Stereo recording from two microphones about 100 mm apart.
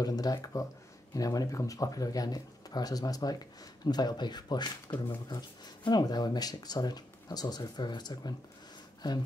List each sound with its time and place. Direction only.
0.0 s speech: 40° left (ahead or behind)